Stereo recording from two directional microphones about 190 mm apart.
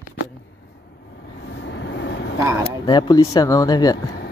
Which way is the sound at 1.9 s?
65° left (ahead or behind).